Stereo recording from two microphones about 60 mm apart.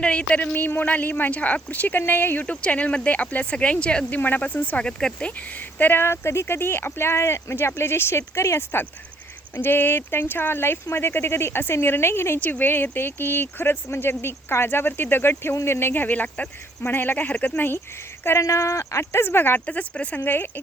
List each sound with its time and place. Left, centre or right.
0.0 s a man's voice: centre
2.6 s a man's voice: left
4.2 s a man's voice: left
4.9 s speech: centre
5.8 s speech: left
9.6 s speech: left
12.4 s a man's voice: left
18.4 s speech: left
19.2 s speech: left
19.6 s a man's voice: left